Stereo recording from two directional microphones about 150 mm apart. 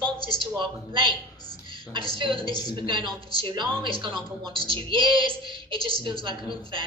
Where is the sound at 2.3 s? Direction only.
25° left (ahead or behind).